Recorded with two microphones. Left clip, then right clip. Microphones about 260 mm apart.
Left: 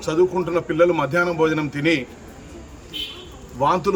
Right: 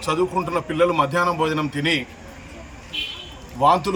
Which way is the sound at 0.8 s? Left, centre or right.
Centre.